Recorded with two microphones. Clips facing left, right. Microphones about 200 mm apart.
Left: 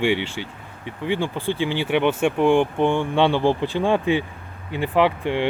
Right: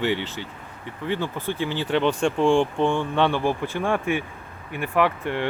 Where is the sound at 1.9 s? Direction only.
15° left (ahead or behind).